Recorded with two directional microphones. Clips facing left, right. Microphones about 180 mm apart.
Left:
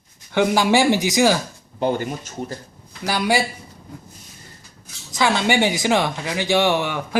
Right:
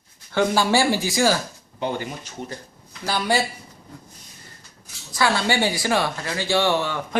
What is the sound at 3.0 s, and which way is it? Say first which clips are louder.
Speech: left 2 dB; 10° left (ahead or behind).